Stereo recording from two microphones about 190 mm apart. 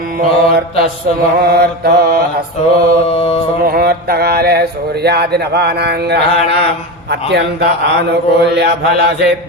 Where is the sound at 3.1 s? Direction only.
30° left (ahead or behind).